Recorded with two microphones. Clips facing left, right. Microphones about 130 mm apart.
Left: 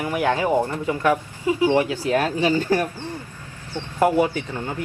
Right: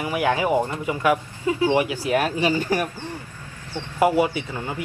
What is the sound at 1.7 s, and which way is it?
Speech, 15° right (ahead or behind).